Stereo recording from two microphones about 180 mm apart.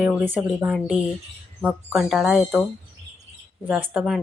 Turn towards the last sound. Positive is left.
turn(degrees=0)  # may be behind; listen again after turning